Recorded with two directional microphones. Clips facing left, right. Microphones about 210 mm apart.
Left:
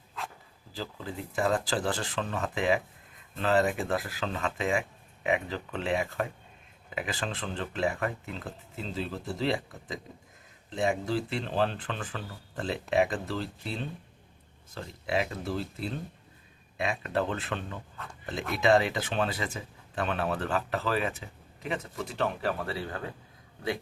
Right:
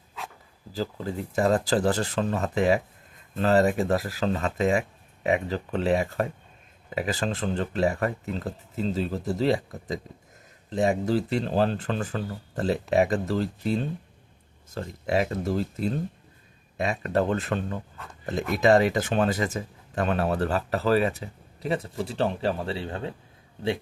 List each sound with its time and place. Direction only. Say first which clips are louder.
0.7 s speech: right 7 dB; 40° right (ahead or behind)
17.9 s a sound: even; 5° right (ahead or behind)
18.5 s speech: right 4 dB; 40° right (ahead or behind); by 23.1 s 25° right (ahead or behind)